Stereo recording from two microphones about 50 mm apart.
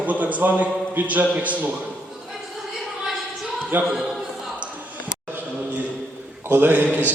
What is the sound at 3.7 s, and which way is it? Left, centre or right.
Speech, right.